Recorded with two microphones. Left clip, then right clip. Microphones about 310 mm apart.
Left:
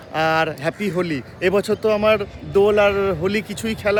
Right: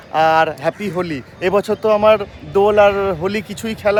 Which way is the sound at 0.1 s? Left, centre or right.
Centre.